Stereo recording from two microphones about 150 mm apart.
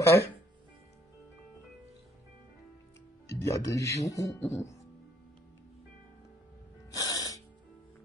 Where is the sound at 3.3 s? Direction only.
20° left (ahead or behind).